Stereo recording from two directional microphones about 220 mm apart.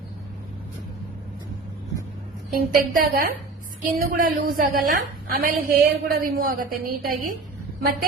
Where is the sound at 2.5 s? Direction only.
40° right (ahead or behind).